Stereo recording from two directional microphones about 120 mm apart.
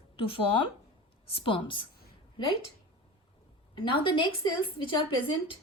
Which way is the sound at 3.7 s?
45° left (ahead or behind).